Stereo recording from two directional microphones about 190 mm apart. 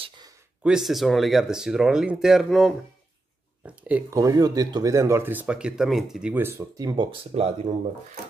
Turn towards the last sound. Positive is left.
turn(degrees=-30)  # may be behind; listen again after turning